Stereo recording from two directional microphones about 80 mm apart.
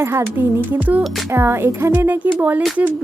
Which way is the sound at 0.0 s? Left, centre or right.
Right.